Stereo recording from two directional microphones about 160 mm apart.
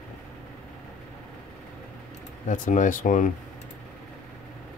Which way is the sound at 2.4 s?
55° left (ahead or behind).